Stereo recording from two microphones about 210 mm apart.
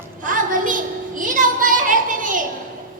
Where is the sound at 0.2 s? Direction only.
40° right (ahead or behind).